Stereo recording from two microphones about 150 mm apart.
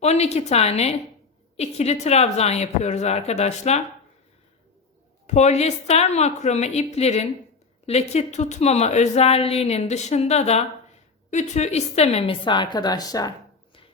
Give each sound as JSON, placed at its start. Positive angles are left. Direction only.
{"t": 0.0, "sound": "a woman's voice", "side_deg": 45}
{"t": 5.2, "sound": "a woman's voice", "side_deg": 50}